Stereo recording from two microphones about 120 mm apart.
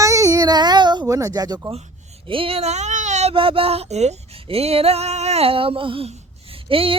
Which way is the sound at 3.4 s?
50° right (ahead or behind).